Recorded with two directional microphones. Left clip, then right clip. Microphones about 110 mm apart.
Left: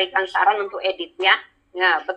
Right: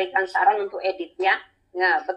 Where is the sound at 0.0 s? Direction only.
30° right (ahead or behind).